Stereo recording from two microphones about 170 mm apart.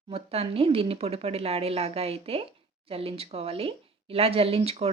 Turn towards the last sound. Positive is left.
turn(degrees=-35)  # may be behind; listen again after turning